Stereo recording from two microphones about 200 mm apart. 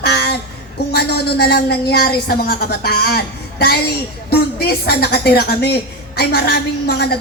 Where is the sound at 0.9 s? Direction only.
55° left (ahead or behind).